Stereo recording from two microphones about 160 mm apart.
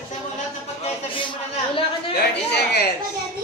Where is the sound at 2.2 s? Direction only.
85° left.